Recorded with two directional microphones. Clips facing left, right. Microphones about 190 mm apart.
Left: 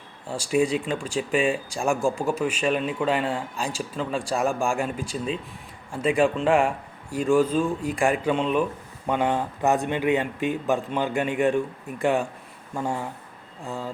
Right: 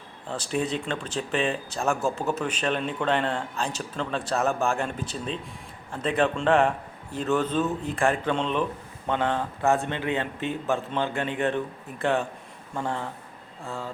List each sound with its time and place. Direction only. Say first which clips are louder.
0.3 s speech: left 5 dB; 10° left (ahead or behind)